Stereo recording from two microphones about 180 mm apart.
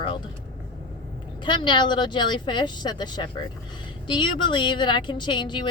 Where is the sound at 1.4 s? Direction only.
25° left (ahead or behind).